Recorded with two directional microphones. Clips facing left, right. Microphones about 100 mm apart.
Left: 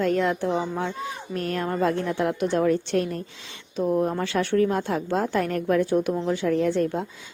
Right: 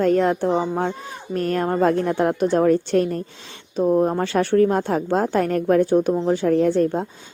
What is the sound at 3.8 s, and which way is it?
Speech, 30° right (ahead or behind).